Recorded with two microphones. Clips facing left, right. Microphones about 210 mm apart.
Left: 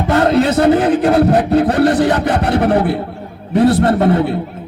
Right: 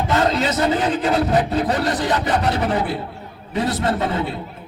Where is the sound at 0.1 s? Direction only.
60° left (ahead or behind).